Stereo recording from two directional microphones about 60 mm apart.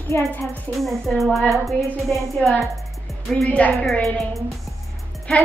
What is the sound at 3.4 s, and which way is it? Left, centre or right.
Speech, left.